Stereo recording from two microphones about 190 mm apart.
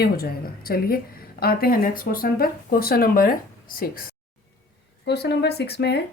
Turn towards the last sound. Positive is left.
turn(degrees=60)  # may be behind; listen again after turning